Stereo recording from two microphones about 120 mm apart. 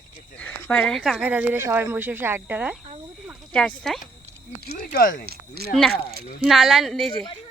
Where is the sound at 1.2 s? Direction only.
15° right (ahead or behind).